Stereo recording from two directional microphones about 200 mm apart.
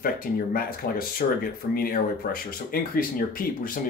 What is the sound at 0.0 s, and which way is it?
Speech, 45° left (ahead or behind).